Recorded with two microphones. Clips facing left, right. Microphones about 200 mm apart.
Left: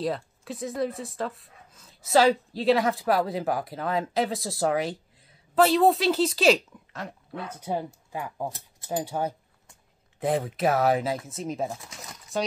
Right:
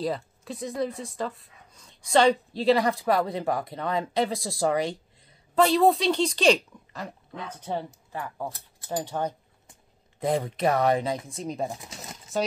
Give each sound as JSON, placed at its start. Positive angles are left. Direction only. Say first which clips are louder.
{"t": 0.0, "sound": "speech", "louder": "even", "side_deg": 0}
{"t": 11.7, "sound": "speech", "louder": "right 1 dB", "side_deg": -15}